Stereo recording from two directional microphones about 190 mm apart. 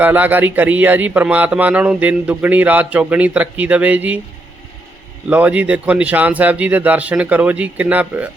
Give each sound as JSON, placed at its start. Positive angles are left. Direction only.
{"t": 0.0, "sound": "speech", "side_deg": -10}
{"t": 5.3, "sound": "speech", "side_deg": -5}